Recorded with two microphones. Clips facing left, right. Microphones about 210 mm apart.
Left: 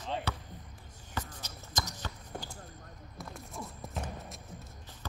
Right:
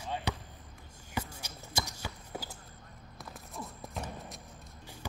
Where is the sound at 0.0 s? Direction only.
15° right (ahead or behind).